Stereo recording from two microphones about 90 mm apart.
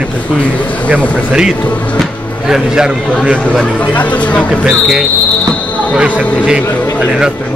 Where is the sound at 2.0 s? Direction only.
5° right (ahead or behind).